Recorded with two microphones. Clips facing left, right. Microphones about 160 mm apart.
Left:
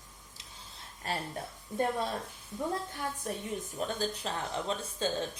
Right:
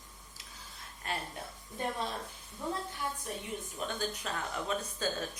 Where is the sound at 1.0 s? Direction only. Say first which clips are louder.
Left 2 dB; 35° left (ahead or behind).